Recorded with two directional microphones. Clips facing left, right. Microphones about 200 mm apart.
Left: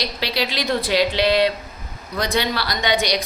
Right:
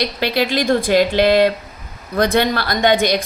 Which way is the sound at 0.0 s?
55° right (ahead or behind).